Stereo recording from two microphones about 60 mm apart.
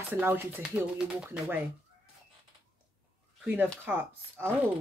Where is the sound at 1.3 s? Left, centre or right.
Right.